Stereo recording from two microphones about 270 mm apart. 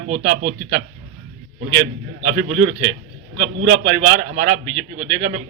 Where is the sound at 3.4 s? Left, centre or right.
Right.